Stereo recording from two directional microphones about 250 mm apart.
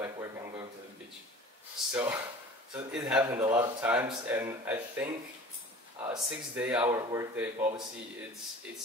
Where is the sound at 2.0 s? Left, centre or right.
Centre.